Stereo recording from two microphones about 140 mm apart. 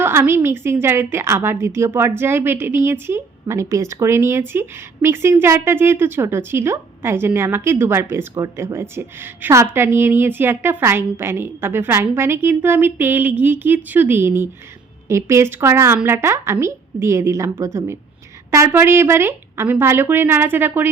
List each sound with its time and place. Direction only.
0.0 s a woman's voice: 15° right (ahead or behind)